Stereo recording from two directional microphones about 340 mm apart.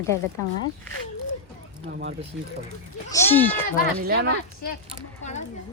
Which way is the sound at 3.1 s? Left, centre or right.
Centre.